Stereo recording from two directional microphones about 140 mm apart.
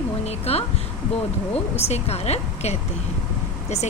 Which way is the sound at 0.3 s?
45° left (ahead or behind).